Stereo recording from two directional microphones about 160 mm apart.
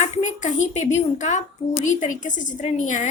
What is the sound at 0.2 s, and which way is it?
A woman's voice, 50° left (ahead or behind).